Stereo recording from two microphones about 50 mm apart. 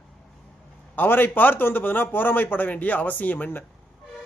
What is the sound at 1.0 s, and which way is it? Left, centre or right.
Speech, left.